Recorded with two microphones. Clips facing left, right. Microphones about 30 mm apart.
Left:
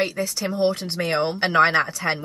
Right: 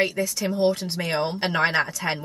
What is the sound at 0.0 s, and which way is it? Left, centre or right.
Speech, left.